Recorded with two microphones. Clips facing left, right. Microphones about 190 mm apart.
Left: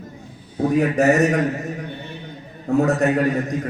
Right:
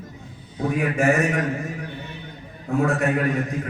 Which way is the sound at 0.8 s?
40° left (ahead or behind).